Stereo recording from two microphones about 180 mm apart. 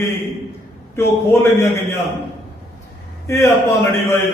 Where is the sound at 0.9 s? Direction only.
15° left (ahead or behind).